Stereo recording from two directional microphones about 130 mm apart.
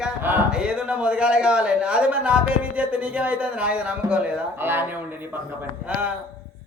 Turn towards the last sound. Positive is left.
turn(degrees=-15)  # may be behind; listen again after turning